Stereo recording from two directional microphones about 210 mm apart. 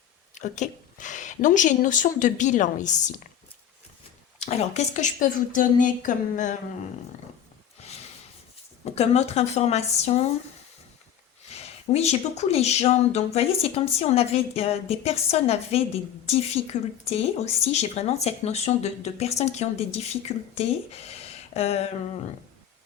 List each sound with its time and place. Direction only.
0.3 s speech: 35° left (ahead or behind)
4.4 s speech: 30° left (ahead or behind)
7.8 s snort: 30° left (ahead or behind)
8.8 s speech: 30° left (ahead or behind)
11.4 s speech: 30° left (ahead or behind)